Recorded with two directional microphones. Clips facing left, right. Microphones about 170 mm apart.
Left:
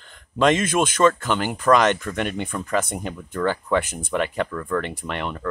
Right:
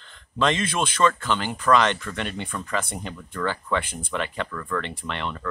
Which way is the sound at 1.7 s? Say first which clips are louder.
Left 2 dB; 10° left (ahead or behind).